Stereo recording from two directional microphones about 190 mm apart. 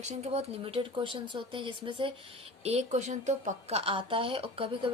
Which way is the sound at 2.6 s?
35° right (ahead or behind).